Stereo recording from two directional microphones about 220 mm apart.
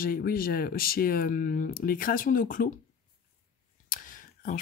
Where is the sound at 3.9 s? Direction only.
35° left (ahead or behind).